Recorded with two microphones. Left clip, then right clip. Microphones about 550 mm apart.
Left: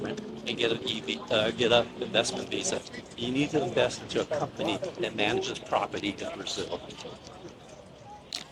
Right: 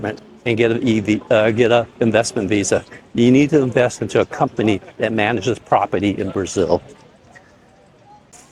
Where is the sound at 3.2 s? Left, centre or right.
Right.